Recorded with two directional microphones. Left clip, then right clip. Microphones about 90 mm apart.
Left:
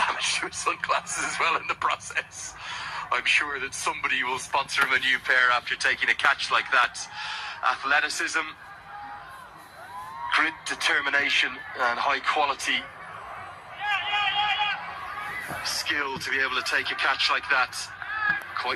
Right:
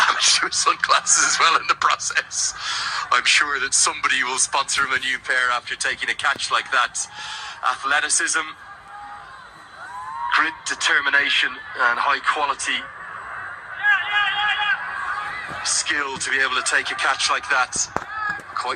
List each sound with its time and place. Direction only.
0.0 s speech: 40° right (ahead or behind); by 8.4 s 25° right (ahead or behind)
10.2 s a man's voice: 15° right (ahead or behind)
13.8 s honk: 30° right (ahead or behind)